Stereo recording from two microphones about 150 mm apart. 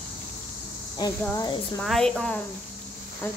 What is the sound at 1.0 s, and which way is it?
Speech, 25° left (ahead or behind).